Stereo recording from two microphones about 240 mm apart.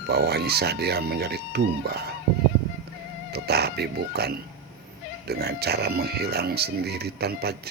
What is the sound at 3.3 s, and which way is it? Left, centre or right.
Speech, right.